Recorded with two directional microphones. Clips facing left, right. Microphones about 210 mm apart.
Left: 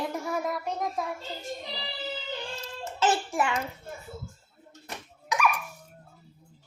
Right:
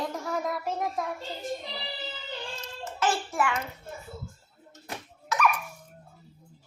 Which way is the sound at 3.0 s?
25° left (ahead or behind).